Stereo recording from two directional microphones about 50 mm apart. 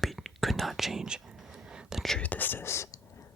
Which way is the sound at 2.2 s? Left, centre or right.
Left.